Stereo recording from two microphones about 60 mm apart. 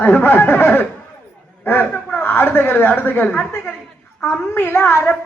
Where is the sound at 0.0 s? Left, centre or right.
Left.